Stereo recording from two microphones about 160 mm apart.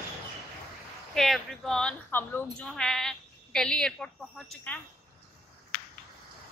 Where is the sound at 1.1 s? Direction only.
Centre (ahead or behind).